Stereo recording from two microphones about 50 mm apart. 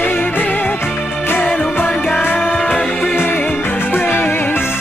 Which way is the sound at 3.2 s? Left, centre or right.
Left.